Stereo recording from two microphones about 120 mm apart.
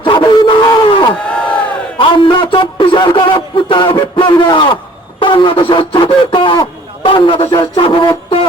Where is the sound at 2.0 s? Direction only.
45° left (ahead or behind).